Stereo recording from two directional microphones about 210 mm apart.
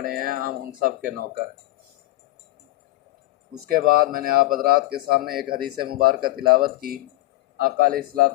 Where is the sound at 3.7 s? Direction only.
45° right (ahead or behind).